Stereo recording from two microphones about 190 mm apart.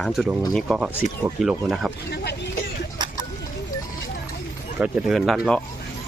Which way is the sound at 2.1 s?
65° left (ahead or behind).